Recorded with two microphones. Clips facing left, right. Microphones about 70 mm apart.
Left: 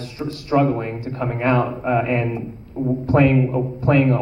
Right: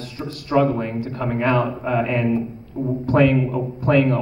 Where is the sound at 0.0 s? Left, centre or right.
Left.